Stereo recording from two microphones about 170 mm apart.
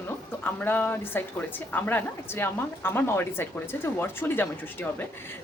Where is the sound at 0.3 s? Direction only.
10° left (ahead or behind).